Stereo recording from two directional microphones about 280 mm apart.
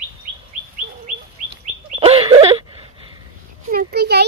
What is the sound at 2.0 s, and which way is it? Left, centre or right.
Wail, right.